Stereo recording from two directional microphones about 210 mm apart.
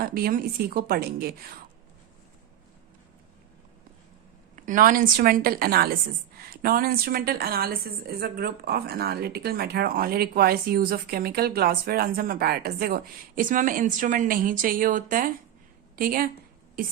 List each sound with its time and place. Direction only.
0.0 s speech: 45° right (ahead or behind)
4.5 s speech: 40° right (ahead or behind)